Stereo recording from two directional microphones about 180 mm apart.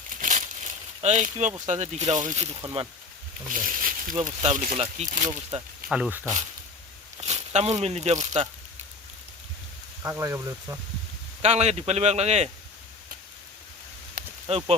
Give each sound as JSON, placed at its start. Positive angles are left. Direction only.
{"t": 0.2, "sound": "a sound", "side_deg": -45}
{"t": 1.6, "sound": "speech", "side_deg": -40}
{"t": 4.1, "sound": "speech", "side_deg": -25}
{"t": 5.9, "sound": "speech", "side_deg": -5}
{"t": 7.2, "sound": "speech", "side_deg": -35}
{"t": 10.0, "sound": "speech", "side_deg": -15}
{"t": 11.4, "sound": "speech", "side_deg": -35}
{"t": 14.4, "sound": "speech", "side_deg": -35}